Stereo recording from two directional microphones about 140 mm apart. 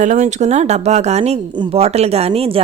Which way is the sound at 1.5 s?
40° right (ahead or behind).